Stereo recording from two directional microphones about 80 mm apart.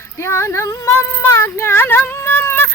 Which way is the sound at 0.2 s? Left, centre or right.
Left.